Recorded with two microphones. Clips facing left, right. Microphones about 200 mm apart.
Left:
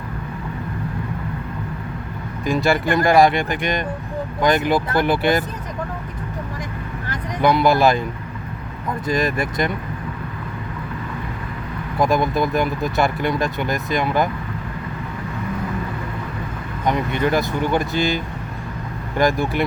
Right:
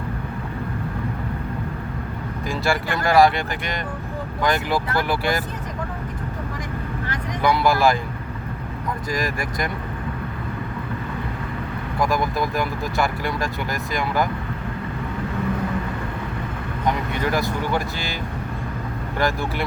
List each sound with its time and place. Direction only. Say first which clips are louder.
2.5 s speech: left 6 dB; 20° left (ahead or behind)
7.4 s speech: left 3 dB; 20° left (ahead or behind)
9.0 s speech: left 6 dB; 25° left (ahead or behind)
11.9 s speech: left 4 dB; 20° left (ahead or behind)
17.3 s speech: left 3 dB; 20° left (ahead or behind)
19.2 s speech: left 5 dB; 15° left (ahead or behind)